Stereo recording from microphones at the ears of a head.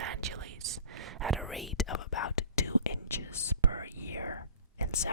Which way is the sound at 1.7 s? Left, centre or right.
Left.